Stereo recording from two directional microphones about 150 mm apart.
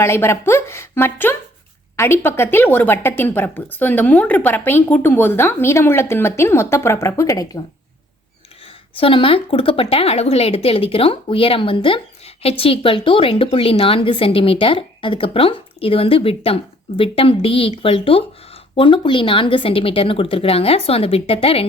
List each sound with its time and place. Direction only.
0.0 s speech: 15° left (ahead or behind)
8.6 s a woman's voice: 35° left (ahead or behind)